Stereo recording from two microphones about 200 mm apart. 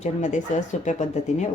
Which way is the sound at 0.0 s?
40° left (ahead or behind).